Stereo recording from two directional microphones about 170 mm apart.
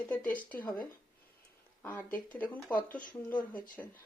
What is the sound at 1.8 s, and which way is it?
Speech, 10° left (ahead or behind).